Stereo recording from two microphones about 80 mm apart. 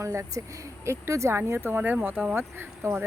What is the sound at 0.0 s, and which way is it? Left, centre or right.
Speech, right.